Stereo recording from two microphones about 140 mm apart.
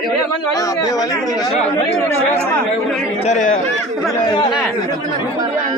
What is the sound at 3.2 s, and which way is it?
Speech, 60° left (ahead or behind).